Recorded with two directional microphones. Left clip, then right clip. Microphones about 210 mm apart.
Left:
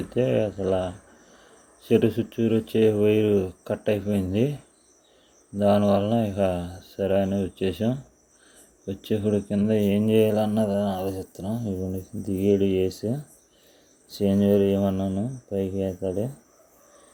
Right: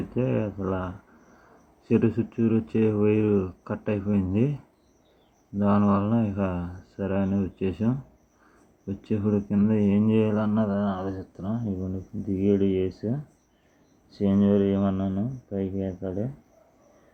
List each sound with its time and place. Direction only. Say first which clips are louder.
0.1 s speech: left 6 dB; 10° left (ahead or behind)
5.5 s speech: left 4 dB; 10° left (ahead or behind)
14.2 s speech: left 3 dB; 15° left (ahead or behind)